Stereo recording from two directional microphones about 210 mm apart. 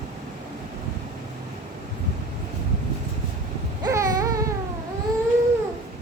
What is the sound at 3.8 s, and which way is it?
Baby cry, 15° right (ahead or behind).